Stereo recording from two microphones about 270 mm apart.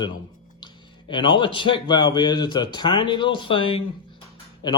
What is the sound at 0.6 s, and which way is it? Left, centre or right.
A man's voice, centre.